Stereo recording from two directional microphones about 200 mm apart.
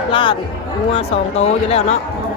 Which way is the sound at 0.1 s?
25° left (ahead or behind).